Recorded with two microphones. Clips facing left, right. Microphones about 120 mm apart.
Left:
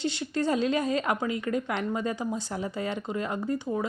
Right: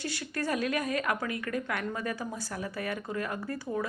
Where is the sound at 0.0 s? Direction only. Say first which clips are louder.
Left 6 dB; 25° left (ahead or behind).